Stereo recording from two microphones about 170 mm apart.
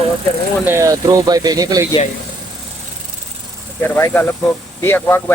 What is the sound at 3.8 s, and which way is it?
Speech, 10° left (ahead or behind).